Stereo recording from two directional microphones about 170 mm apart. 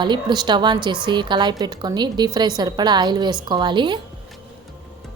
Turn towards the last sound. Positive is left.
turn(degrees=-30)  # may be behind; listen again after turning